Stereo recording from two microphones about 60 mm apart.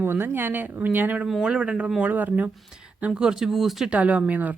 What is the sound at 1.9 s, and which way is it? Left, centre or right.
Speech, right.